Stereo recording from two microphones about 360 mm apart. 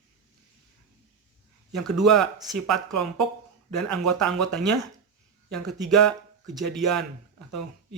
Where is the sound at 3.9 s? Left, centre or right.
Centre.